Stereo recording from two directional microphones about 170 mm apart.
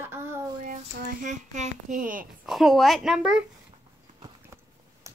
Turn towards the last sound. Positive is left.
turn(degrees=-20)  # may be behind; listen again after turning